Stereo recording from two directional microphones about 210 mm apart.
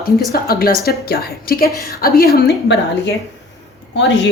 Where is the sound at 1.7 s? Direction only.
15° left (ahead or behind).